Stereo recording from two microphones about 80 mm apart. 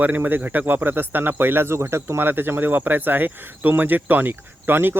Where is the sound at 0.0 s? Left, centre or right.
Right.